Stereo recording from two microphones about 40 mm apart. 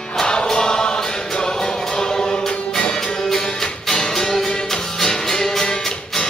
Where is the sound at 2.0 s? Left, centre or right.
Centre.